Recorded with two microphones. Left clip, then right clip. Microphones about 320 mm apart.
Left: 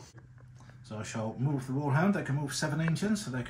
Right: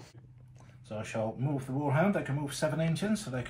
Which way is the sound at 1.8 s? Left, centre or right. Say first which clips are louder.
Right 2 dB; centre.